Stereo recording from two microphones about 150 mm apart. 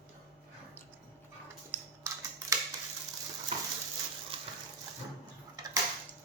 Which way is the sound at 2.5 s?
20° right (ahead or behind).